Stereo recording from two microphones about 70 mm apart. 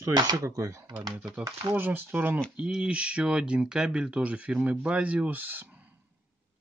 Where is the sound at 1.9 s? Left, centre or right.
Right.